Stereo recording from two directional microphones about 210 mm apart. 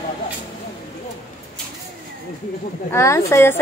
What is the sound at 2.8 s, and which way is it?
Speech, 15° left (ahead or behind).